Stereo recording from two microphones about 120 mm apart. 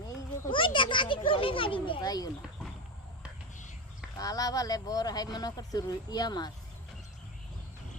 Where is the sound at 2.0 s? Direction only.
30° left (ahead or behind).